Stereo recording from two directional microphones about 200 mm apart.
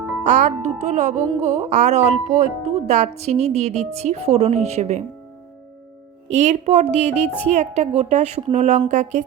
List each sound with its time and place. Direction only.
0.3 s speech: 40° right (ahead or behind)
6.2 s speech: 35° right (ahead or behind)